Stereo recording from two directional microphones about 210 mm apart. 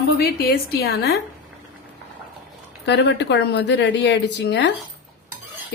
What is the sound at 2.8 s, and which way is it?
A woman's voice, 55° left (ahead or behind).